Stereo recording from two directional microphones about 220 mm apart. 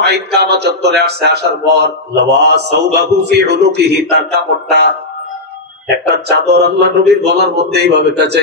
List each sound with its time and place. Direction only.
0.0 s a man's voice: 50° right (ahead or behind)
6.1 s a man's voice: 50° right (ahead or behind)